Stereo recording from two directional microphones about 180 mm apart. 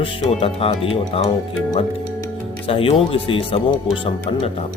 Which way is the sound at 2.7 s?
30° left (ahead or behind).